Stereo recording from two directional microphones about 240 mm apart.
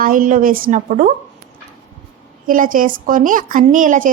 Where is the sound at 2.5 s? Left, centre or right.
Right.